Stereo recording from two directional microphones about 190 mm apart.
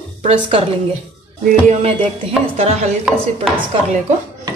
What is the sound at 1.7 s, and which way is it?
Speech, 30° right (ahead or behind).